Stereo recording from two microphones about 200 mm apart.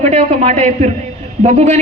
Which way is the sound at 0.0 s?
35° right (ahead or behind).